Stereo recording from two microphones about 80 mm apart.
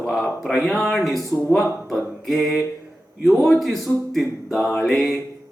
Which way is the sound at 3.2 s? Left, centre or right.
Centre.